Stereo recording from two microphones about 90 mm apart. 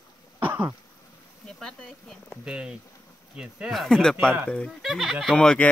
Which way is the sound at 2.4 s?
10° right (ahead or behind).